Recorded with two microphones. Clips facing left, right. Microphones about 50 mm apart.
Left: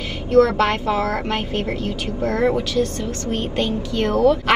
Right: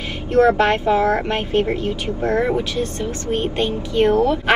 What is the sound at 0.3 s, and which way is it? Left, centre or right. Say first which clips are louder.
A woman's voice: right 1 dB; right.